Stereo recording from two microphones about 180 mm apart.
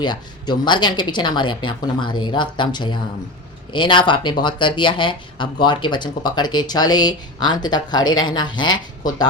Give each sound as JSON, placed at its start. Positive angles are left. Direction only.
{"t": 0.0, "sound": "speech", "side_deg": 25}